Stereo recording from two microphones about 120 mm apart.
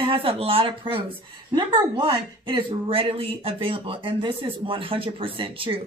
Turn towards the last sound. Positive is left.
turn(degrees=-50)  # may be behind; listen again after turning